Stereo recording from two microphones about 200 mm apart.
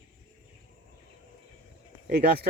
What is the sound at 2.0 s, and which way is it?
Speech, 50° right (ahead or behind).